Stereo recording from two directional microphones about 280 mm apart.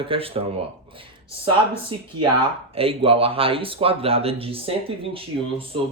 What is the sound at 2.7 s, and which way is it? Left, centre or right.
Speech, centre.